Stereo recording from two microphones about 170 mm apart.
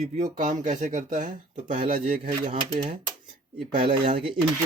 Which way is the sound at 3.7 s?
30° right (ahead or behind).